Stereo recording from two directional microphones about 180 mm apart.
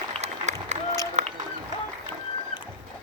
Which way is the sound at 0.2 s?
40° right (ahead or behind).